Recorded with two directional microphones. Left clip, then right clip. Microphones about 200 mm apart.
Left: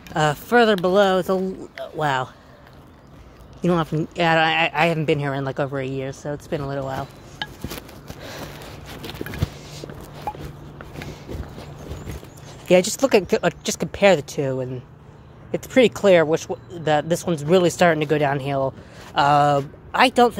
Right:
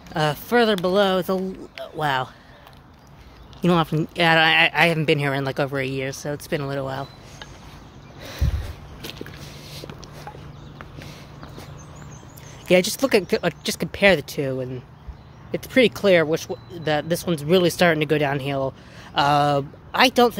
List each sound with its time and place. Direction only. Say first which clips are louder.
0.1 s a man's voice: left 2 dB; centre (ahead or behind)
3.6 s speech: right 1 dB; 20° right (ahead or behind)
10.3 s a sound: left 11 dB; 40° left (ahead or behind)
12.6 s a man's voice: left 2 dB; centre (ahead or behind)